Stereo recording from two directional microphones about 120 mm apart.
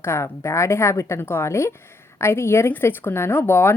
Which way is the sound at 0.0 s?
20° left (ahead or behind).